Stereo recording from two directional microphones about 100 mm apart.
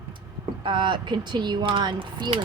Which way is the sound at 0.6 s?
55° right (ahead or behind).